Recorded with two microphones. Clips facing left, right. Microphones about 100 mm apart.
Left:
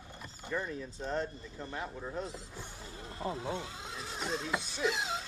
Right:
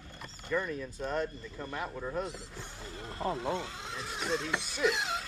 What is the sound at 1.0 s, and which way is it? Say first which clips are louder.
Speech: right 2 dB; 75° right (ahead or behind).